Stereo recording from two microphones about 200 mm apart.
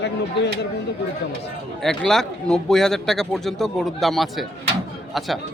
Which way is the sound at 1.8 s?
Centre (ahead or behind).